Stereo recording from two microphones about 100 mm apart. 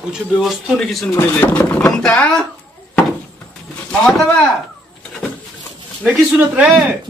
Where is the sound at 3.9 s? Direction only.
5° left (ahead or behind).